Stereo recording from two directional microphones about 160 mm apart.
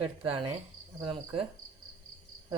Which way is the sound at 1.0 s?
30° right (ahead or behind).